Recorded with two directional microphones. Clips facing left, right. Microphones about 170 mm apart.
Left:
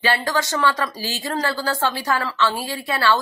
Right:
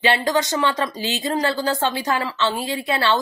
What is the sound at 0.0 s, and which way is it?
Speech, 20° right (ahead or behind).